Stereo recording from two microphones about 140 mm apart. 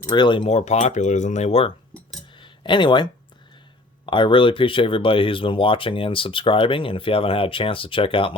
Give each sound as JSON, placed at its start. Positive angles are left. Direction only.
{"t": 0.1, "sound": "speech", "side_deg": 35}
{"t": 0.4, "sound": "speech", "side_deg": 55}
{"t": 2.4, "sound": "a sound", "side_deg": 35}
{"t": 4.0, "sound": "speech", "side_deg": 35}